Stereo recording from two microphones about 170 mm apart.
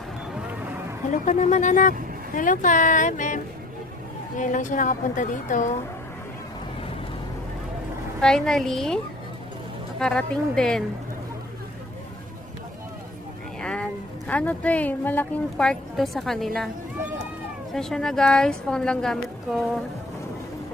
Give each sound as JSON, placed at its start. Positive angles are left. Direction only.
{"t": 1.1, "sound": "a woman's voice", "side_deg": 45}
{"t": 4.4, "sound": "a woman's voice", "side_deg": 50}
{"t": 8.2, "sound": "a woman's voice", "side_deg": 5}
{"t": 13.6, "sound": "speech", "side_deg": 5}
{"t": 17.7, "sound": "a woman's voice", "side_deg": 5}